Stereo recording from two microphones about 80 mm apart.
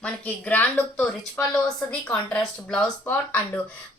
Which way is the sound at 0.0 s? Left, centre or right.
Centre.